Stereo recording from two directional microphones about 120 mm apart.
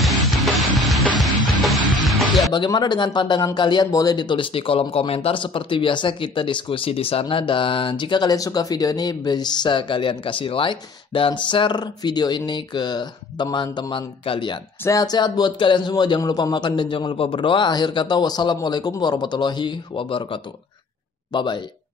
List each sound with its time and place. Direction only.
0.0 s music: centre (ahead or behind)
2.5 s speech: 40° left (ahead or behind)
14.8 s speech: 30° left (ahead or behind)